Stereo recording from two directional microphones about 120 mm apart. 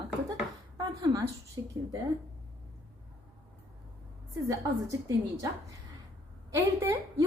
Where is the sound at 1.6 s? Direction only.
35° right (ahead or behind).